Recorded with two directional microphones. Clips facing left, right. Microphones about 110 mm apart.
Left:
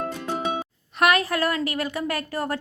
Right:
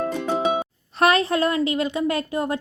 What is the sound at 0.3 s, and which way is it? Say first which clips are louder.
Music: right 5 dB; 20° right (ahead or behind).